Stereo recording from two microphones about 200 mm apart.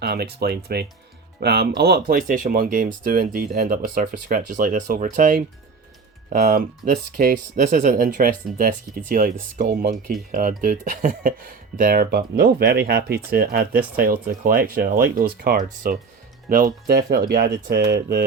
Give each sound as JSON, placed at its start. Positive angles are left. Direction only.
{"t": 0.0, "sound": "speech", "side_deg": -55}